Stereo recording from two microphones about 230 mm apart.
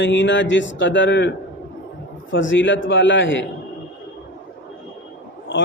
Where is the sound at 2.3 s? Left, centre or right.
Left.